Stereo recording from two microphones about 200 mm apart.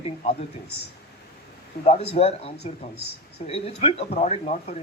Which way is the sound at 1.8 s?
30° left (ahead or behind).